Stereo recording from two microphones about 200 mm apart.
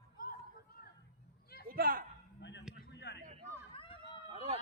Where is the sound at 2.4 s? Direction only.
60° left (ahead or behind).